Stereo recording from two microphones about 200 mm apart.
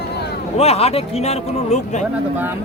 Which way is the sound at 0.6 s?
30° left (ahead or behind).